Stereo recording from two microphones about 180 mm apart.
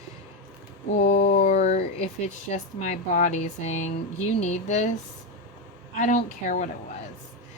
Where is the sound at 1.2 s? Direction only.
40° left (ahead or behind).